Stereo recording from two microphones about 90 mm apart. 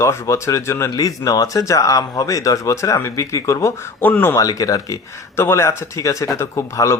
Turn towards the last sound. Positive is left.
turn(degrees=30)  # may be behind; listen again after turning